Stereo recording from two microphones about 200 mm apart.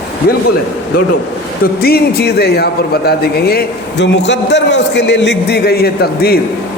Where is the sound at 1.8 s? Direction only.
50° left (ahead or behind).